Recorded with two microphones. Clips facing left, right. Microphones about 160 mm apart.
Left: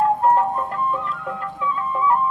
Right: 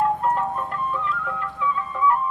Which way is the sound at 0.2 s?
35° left (ahead or behind).